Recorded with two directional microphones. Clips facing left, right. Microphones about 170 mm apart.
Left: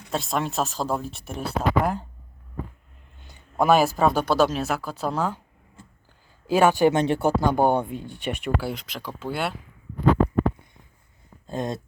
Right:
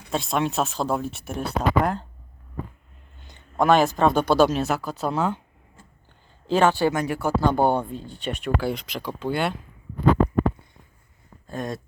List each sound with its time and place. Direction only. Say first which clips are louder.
0.1 s speech: right 2 dB; centre (ahead or behind)
3.2 s speech: even; 5° left (ahead or behind)
6.5 s speech: left 2 dB; 10° left (ahead or behind)
6.9 s speech: left 4 dB; 25° left (ahead or behind)
7.4 s speech: right 3 dB; 15° left (ahead or behind)
11.4 s a sound: left 2 dB; 20° left (ahead or behind)